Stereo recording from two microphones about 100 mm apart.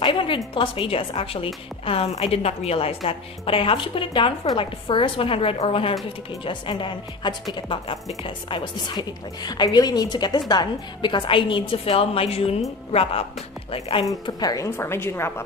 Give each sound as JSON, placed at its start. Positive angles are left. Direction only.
{"t": 0.0, "sound": "a woman's voice", "side_deg": 60}
{"t": 3.1, "sound": "a woman's voice", "side_deg": 65}
{"t": 6.4, "sound": "a woman's voice", "side_deg": 60}
{"t": 12.9, "sound": "a woman's voice", "side_deg": 75}
{"t": 14.2, "sound": "a woman's voice", "side_deg": 40}
{"t": 14.8, "sound": "a woman's voice", "side_deg": 25}